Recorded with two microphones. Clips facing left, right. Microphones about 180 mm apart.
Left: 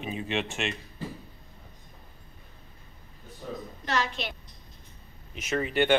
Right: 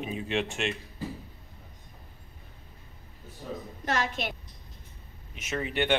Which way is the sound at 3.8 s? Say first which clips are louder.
Even; 50° right (ahead or behind).